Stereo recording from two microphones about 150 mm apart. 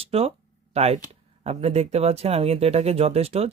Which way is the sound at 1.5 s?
45° right (ahead or behind).